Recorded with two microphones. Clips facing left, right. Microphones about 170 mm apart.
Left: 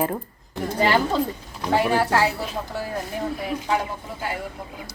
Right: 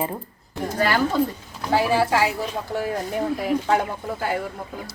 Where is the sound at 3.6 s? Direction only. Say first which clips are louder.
Even; 55° right (ahead or behind).